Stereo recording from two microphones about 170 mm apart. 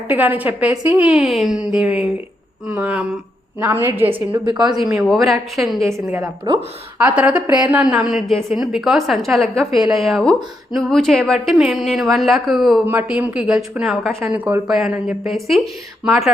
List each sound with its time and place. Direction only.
0.1 s a woman's voice: 10° right (ahead or behind)
4.4 s speech: 25° right (ahead or behind)
5.0 s speech: centre (ahead or behind)
5.8 s a woman's voice: 15° right (ahead or behind)